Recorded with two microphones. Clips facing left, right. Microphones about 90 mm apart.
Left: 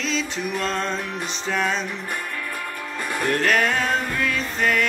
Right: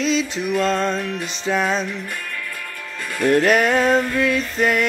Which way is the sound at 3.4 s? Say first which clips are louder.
Right 5 dB; 20° right (ahead or behind).